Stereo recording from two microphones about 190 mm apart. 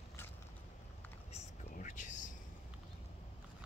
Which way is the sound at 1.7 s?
40° left (ahead or behind).